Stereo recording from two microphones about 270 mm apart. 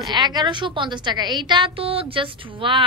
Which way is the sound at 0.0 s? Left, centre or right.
Centre.